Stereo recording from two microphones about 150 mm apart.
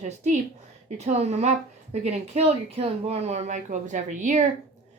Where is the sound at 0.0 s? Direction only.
55° right (ahead or behind).